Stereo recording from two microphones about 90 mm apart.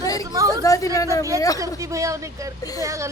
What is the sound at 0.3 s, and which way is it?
Chatter, 40° right (ahead or behind).